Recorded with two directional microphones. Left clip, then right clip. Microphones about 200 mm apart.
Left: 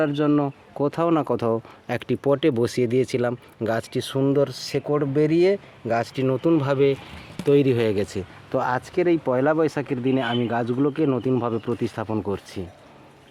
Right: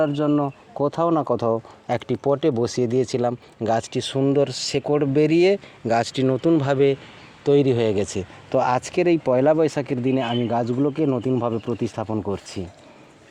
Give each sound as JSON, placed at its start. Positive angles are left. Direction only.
{"t": 0.0, "sound": "speech", "side_deg": -5}
{"t": 7.4, "sound": "speech", "side_deg": -5}
{"t": 8.6, "sound": "speech", "side_deg": -25}